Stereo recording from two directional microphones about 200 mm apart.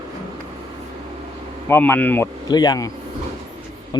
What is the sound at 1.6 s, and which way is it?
Speech, 10° left (ahead or behind).